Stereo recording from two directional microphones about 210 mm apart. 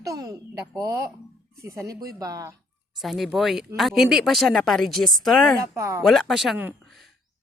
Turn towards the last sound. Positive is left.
turn(degrees=-5)  # may be behind; listen again after turning